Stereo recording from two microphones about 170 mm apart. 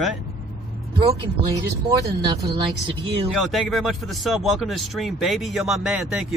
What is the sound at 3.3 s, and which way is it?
Speech, centre (ahead or behind).